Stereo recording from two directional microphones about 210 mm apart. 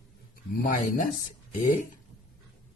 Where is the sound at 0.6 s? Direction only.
40° left (ahead or behind).